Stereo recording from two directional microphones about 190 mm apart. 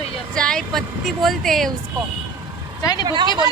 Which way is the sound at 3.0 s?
20° right (ahead or behind).